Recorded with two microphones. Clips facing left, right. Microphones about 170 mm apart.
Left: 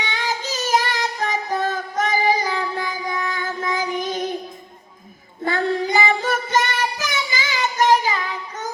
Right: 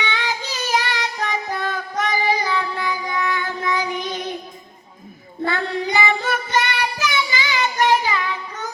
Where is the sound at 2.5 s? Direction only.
45° left (ahead or behind).